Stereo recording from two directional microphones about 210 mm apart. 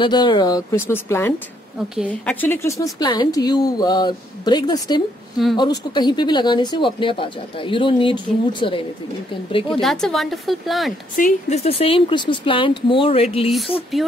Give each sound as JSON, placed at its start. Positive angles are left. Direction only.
{"t": 0.0, "sound": "speech", "side_deg": 20}
{"t": 9.8, "sound": "speech", "side_deg": 0}
{"t": 11.1, "sound": "speech", "side_deg": 35}